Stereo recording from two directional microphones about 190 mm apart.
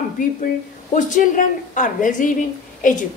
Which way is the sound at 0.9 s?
40° left (ahead or behind).